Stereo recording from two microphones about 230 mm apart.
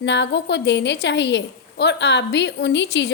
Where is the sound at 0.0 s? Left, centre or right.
Left.